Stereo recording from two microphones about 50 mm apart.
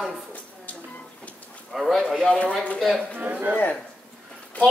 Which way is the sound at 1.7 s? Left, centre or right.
Centre.